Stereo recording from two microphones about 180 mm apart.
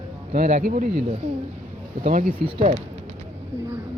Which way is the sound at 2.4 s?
30° right (ahead or behind).